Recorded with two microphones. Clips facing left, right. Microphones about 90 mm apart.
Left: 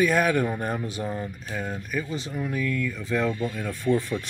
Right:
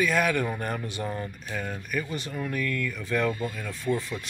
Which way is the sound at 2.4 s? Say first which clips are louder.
Left 2 dB; 15° left (ahead or behind).